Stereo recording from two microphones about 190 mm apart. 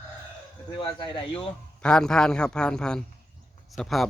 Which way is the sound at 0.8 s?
25° left (ahead or behind).